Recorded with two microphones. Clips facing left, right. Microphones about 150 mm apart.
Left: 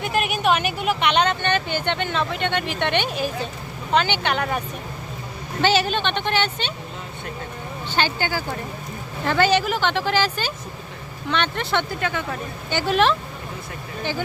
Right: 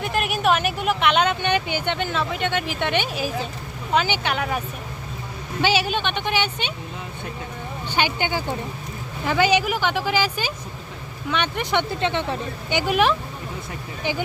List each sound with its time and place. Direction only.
0.0 s speech: centre (ahead or behind)
5.6 s speech: 10° right (ahead or behind)
7.9 s speech: 15° right (ahead or behind)
12.9 s speech: 10° right (ahead or behind)